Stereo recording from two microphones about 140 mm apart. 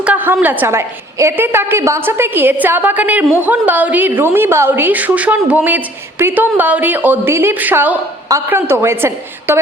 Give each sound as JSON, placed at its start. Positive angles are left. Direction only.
{"t": 0.0, "sound": "a woman's voice", "side_deg": -10}